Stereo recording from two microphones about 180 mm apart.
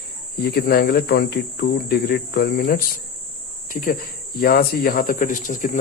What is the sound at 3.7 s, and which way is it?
Speech, 50° left (ahead or behind).